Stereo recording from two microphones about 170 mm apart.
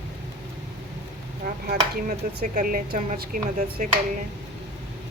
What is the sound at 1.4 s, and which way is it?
Speech, 60° right (ahead or behind).